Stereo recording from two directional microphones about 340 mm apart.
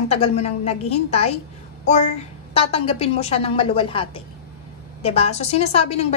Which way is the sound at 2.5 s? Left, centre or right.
Centre.